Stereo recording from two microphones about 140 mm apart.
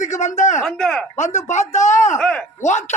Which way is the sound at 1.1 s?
55° left (ahead or behind).